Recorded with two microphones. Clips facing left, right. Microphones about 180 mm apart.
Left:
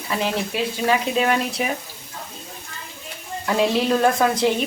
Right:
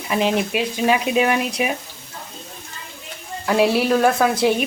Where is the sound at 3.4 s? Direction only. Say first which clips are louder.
Right 2 dB; 5° right (ahead or behind).